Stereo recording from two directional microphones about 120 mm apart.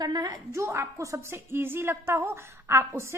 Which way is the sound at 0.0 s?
35° right (ahead or behind).